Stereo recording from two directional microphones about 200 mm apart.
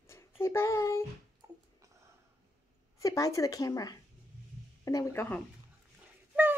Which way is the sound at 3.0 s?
15° left (ahead or behind).